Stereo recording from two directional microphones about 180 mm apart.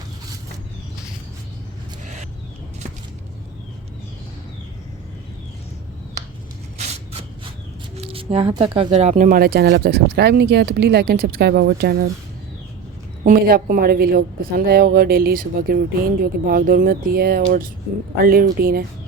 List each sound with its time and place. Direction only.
6.7 s a sound: 35° right (ahead or behind)
7.9 s a woman's voice: 30° right (ahead or behind); by 12.0 s 65° right (ahead or behind)
13.2 s a woman's voice: 55° right (ahead or behind)